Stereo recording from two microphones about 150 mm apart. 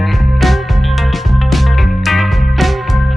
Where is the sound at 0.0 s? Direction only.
Centre (ahead or behind).